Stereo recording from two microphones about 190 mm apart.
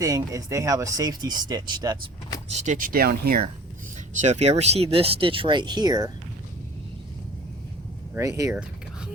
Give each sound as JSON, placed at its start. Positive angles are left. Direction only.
{"t": 0.0, "sound": "speech", "side_deg": -20}
{"t": 2.5, "sound": "speech", "side_deg": -40}
{"t": 4.2, "sound": "speech", "side_deg": -35}
{"t": 8.1, "sound": "speech", "side_deg": -15}